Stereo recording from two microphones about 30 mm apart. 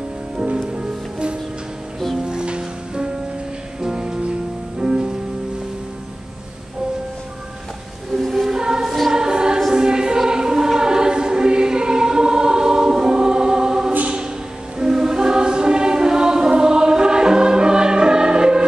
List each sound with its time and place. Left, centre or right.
2.1 s music: right
8.2 s choir: centre
14.8 s music: centre